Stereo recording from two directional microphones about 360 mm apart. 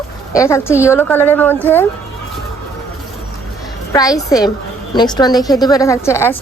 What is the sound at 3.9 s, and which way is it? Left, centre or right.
A woman's voice, centre.